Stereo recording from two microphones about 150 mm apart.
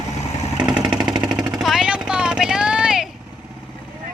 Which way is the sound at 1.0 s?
30° right (ahead or behind).